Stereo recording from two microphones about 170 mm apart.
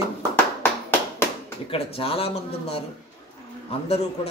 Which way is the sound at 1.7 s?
35° left (ahead or behind).